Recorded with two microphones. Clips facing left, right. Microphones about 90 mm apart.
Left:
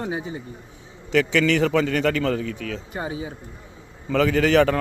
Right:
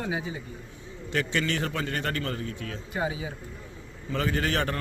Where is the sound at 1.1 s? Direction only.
90° left.